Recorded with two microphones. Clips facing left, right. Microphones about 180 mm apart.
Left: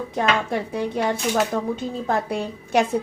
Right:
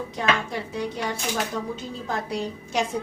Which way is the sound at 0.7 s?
50° left (ahead or behind).